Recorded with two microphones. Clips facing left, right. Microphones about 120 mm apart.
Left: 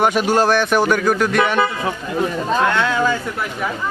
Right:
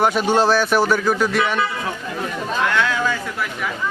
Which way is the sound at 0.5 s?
5° right (ahead or behind).